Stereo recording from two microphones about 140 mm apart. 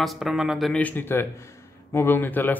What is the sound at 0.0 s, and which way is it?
Speech, centre (ahead or behind).